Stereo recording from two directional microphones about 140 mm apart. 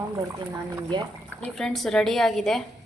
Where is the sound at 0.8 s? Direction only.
30° right (ahead or behind).